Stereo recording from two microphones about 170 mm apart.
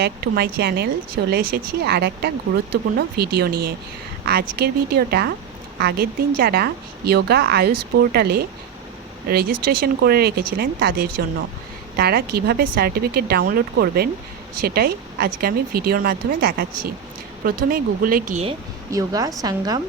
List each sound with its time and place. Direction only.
0.0 s a woman's voice: 70° right (ahead or behind); by 18.4 s 50° right (ahead or behind)
18.9 s a woman's voice: 20° right (ahead or behind)